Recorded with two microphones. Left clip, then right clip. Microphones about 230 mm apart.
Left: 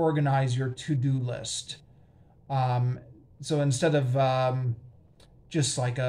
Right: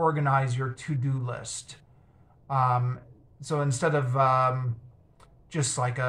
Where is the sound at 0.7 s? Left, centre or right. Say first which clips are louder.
Left 3 dB; centre.